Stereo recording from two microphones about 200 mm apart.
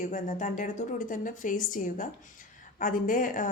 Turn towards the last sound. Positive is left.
turn(degrees=40)  # may be behind; listen again after turning